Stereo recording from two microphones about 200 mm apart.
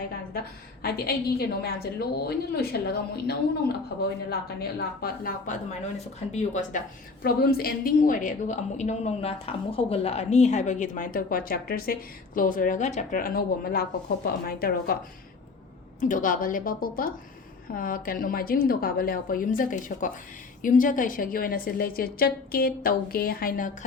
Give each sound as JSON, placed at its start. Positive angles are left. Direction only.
{"t": 0.8, "sound": "a woman's voice", "side_deg": 50}
{"t": 6.3, "sound": "a woman's voice", "side_deg": 35}
{"t": 7.2, "sound": "a woman's voice", "side_deg": 50}
{"t": 16.0, "sound": "a woman's voice", "side_deg": 40}